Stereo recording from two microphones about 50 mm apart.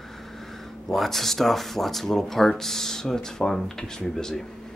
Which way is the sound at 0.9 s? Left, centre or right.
Centre.